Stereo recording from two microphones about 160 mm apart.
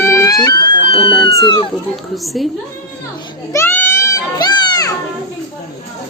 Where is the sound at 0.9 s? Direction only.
35° left (ahead or behind).